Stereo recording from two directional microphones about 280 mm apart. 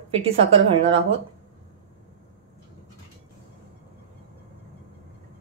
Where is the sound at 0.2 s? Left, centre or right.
Right.